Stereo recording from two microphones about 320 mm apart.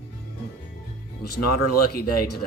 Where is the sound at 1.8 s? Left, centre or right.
Left.